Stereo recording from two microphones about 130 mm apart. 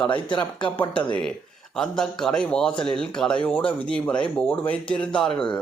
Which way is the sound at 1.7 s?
5° left (ahead or behind).